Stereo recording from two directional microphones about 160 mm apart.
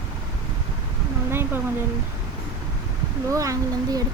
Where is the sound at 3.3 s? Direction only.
20° right (ahead or behind).